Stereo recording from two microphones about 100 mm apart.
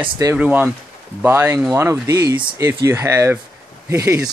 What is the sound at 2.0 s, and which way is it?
Speech, 35° right (ahead or behind).